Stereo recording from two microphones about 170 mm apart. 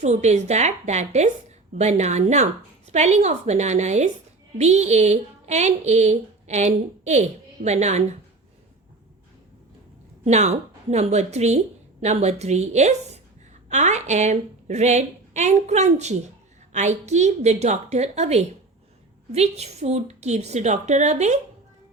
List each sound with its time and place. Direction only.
0.0 s a woman's voice: 40° right (ahead or behind)
10.2 s a woman's voice: 40° right (ahead or behind)